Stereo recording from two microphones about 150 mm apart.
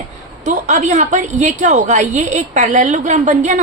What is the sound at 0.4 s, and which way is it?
A woman's voice, 55° right (ahead or behind).